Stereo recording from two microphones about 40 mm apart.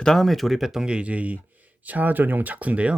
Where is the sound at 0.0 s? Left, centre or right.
Centre.